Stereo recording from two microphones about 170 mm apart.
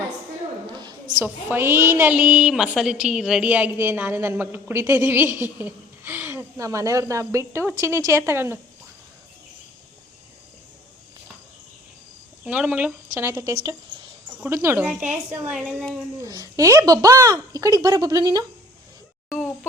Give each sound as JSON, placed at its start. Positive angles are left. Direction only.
{"t": 0.7, "sound": "a sound", "side_deg": -25}
{"t": 1.2, "sound": "a woman's voice", "side_deg": -10}
{"t": 12.5, "sound": "a woman's voice", "side_deg": -10}
{"t": 16.2, "sound": "speech", "side_deg": -20}